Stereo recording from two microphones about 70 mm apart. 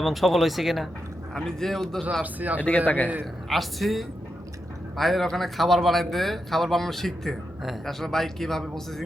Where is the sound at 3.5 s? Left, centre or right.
Centre.